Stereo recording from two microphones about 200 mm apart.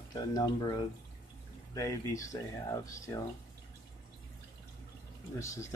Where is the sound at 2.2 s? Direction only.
15° left (ahead or behind).